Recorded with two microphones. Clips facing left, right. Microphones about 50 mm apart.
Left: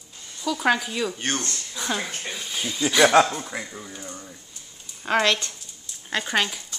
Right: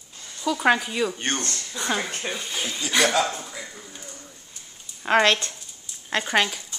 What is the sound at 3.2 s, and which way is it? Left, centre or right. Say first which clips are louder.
Speech: left 6 dB; left.